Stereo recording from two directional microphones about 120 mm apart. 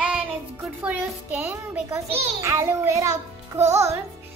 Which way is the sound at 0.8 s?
10° right (ahead or behind).